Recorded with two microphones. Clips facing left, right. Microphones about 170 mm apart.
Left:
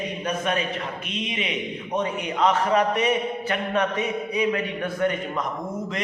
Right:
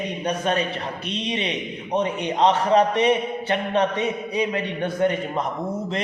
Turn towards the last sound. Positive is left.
turn(degrees=-30)  # may be behind; listen again after turning